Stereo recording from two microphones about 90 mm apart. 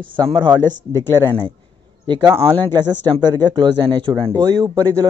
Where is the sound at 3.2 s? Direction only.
60° right (ahead or behind).